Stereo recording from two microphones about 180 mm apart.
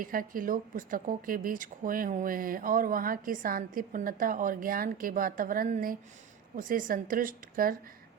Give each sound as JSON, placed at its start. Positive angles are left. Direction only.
{"t": 0.0, "sound": "speech", "side_deg": -50}